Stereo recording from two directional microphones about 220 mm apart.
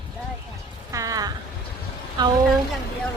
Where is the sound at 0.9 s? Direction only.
15° right (ahead or behind).